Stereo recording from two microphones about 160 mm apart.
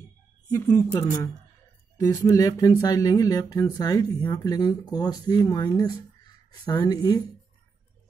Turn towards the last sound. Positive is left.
turn(degrees=25)  # may be behind; listen again after turning